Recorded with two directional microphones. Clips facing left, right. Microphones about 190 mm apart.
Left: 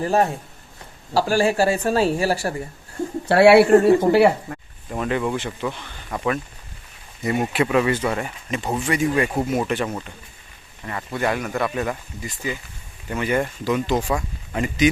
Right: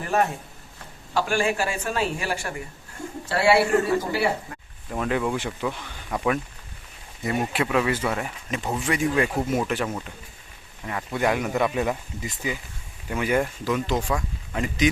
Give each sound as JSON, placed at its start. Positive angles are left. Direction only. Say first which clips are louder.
{"t": 0.0, "sound": "speech", "louder": "left 4 dB", "side_deg": 35}
{"t": 3.2, "sound": "speech", "louder": "left 8 dB", "side_deg": 65}
{"t": 4.9, "sound": "speech", "louder": "left 2 dB", "side_deg": 0}